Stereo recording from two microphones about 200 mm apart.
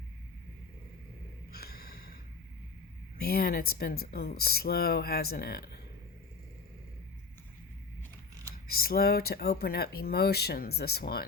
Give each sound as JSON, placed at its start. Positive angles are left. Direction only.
{"t": 1.5, "sound": "gasp", "side_deg": 50}
{"t": 3.2, "sound": "speech", "side_deg": 50}
{"t": 8.6, "sound": "speech", "side_deg": 50}